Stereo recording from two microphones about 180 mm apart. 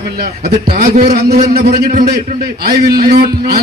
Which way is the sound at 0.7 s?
55° right (ahead or behind).